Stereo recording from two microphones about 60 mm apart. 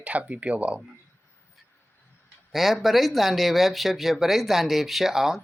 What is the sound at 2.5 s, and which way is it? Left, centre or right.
Speech, centre.